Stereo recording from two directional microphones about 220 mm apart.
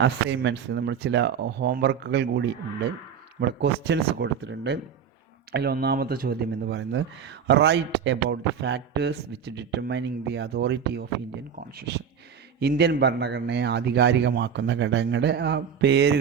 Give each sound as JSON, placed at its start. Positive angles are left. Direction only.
{"t": 0.0, "sound": "a man's voice", "side_deg": -55}
{"t": 12.5, "sound": "a man's voice", "side_deg": -45}